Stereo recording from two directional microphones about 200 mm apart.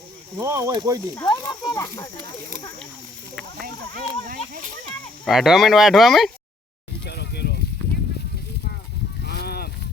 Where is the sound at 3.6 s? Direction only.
45° right (ahead or behind).